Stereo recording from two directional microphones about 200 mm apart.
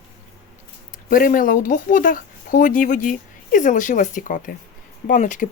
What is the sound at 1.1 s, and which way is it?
Speech, 45° left (ahead or behind).